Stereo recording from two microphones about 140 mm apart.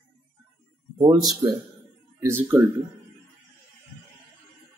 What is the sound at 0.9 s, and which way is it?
Speech, 30° right (ahead or behind).